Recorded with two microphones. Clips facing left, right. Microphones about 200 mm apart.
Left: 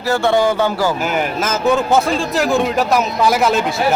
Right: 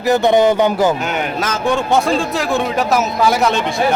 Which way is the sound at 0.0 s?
20° right (ahead or behind).